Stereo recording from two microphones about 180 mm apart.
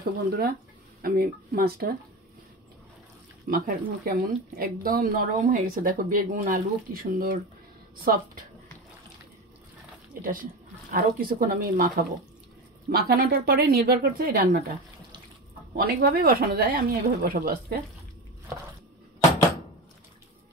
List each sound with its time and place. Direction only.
0.0 s speech: 55° right (ahead or behind)
3.4 s speech: 55° right (ahead or behind)
10.2 s speech: 50° right (ahead or behind)
12.9 s speech: 55° right (ahead or behind)
15.7 s speech: 55° right (ahead or behind)